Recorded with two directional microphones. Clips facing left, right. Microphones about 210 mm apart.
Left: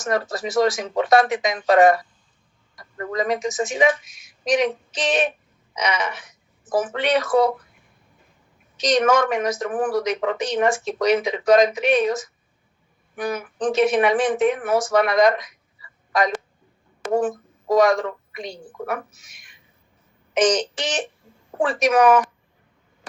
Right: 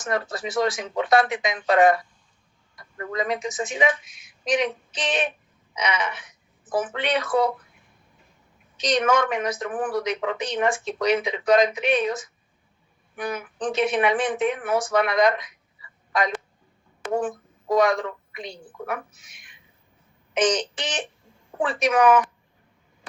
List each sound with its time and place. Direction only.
0.0 s speech: 40° left (ahead or behind)
8.8 s a woman's voice: 45° left (ahead or behind)